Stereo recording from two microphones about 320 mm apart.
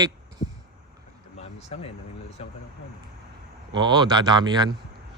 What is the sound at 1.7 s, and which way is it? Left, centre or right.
Speech, centre.